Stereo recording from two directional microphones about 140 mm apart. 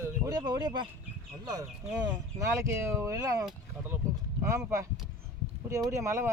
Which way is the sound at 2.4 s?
20° right (ahead or behind).